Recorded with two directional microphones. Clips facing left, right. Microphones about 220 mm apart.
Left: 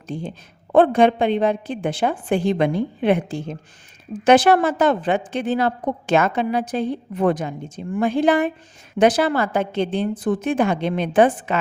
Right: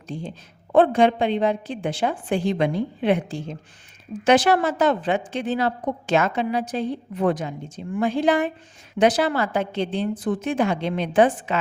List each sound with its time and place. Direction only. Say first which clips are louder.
0.1 s a woman's voice: left 3 dB; 55° left (ahead or behind)